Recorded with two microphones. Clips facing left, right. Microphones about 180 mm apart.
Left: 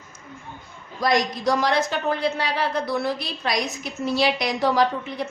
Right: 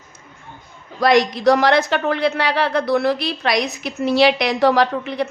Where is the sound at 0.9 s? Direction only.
70° right (ahead or behind).